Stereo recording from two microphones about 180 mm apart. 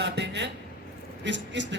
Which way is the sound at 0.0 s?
75° right (ahead or behind).